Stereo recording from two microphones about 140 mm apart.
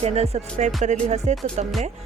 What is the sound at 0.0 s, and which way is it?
Music, 50° right (ahead or behind).